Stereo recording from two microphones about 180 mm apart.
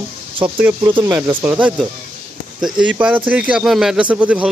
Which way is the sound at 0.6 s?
10° right (ahead or behind).